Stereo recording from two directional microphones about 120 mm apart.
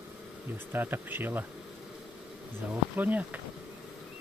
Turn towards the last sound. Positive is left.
turn(degrees=-15)  # may be behind; listen again after turning